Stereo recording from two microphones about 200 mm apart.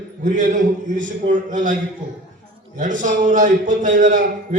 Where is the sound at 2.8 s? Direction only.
40° right (ahead or behind).